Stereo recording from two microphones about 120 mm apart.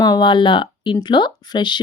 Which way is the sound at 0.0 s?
35° left (ahead or behind).